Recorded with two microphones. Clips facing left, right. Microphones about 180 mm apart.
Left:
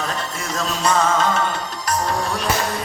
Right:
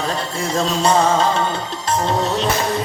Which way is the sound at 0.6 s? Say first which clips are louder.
Right 4 dB; 30° right (ahead or behind).